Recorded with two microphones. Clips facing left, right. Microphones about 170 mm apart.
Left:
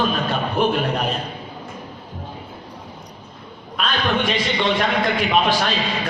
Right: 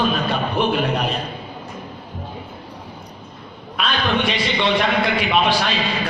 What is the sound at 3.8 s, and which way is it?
A man's voice, 40° left (ahead or behind).